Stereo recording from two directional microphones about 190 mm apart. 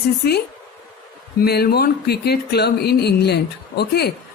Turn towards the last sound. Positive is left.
turn(degrees=60)  # may be behind; listen again after turning